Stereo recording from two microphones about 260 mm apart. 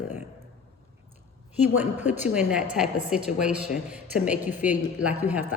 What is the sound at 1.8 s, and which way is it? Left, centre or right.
A woman's voice, centre.